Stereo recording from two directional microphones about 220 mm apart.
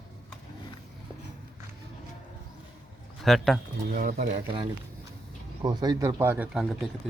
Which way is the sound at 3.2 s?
Centre (ahead or behind).